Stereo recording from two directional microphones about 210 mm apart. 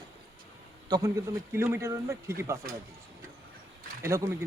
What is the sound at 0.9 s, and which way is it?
Speech, 15° right (ahead or behind).